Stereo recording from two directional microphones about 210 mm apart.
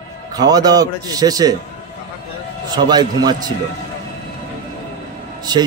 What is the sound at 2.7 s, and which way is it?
Speech, 20° right (ahead or behind).